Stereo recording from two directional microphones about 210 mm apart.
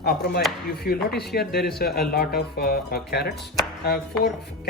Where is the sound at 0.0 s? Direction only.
50° left (ahead or behind).